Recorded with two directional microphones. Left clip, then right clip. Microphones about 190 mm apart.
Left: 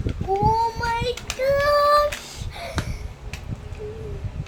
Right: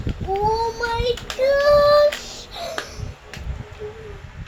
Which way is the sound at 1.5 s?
60° left (ahead or behind).